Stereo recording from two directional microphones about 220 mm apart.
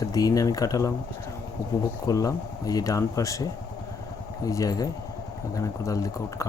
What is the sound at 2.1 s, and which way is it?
Speech, 15° left (ahead or behind).